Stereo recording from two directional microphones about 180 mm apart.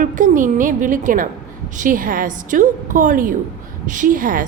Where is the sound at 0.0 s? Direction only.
45° right (ahead or behind).